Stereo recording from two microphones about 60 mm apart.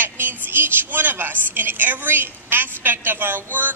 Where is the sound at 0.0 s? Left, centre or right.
Right.